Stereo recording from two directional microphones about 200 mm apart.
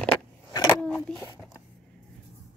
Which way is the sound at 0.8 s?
Centre (ahead or behind).